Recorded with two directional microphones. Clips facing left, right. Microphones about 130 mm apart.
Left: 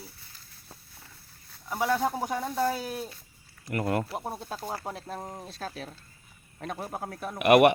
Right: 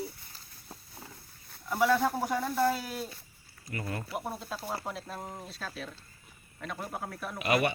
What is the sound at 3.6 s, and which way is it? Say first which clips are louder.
Speech: left 9 dB; 65° left (ahead or behind).